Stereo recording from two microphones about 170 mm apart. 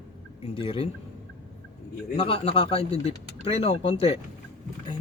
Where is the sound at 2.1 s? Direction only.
30° left (ahead or behind).